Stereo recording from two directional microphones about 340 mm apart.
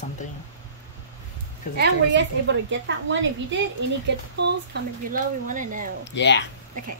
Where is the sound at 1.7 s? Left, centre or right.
Right.